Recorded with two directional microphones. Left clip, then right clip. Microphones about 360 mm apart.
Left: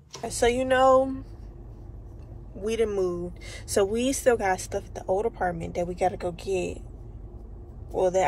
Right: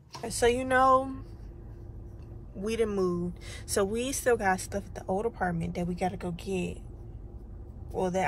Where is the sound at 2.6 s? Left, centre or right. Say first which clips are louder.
Left 3 dB; centre.